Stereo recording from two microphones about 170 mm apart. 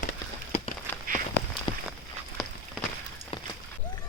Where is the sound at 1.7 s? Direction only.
25° left (ahead or behind).